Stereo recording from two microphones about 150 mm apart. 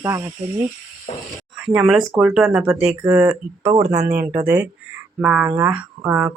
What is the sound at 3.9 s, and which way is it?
Speech, 90° right.